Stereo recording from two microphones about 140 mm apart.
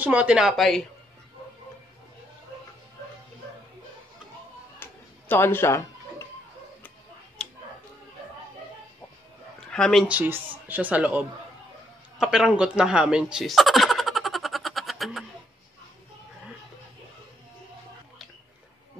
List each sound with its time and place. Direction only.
0.0 s speech: 10° right (ahead or behind)
5.3 s speech: 15° left (ahead or behind)
7.4 s a sound: 5° left (ahead or behind)
9.7 s speech: 5° left (ahead or behind)
10.0 s speech: 10° right (ahead or behind)
12.2 s a sound: 5° right (ahead or behind)